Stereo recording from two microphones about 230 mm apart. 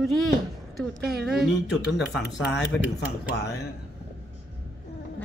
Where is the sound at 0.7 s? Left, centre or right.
Centre.